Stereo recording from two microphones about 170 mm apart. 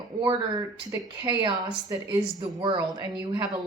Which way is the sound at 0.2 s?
25° right (ahead or behind).